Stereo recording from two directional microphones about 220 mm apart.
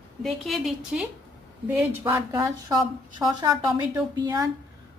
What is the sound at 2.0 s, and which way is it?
A woman's voice, 15° right (ahead or behind).